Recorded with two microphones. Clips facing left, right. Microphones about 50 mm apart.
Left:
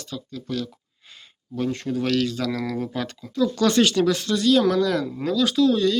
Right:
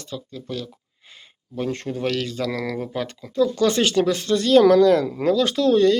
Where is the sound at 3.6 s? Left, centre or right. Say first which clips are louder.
Left 3 dB; centre; by 6.0 s right.